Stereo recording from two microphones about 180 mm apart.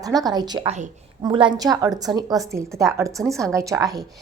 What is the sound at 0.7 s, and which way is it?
Speech, 40° right (ahead or behind).